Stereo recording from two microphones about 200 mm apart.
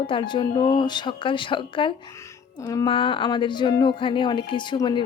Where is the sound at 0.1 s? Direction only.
25° left (ahead or behind).